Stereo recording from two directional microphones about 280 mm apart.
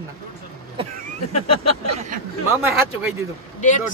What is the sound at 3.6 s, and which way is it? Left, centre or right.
Speech, left.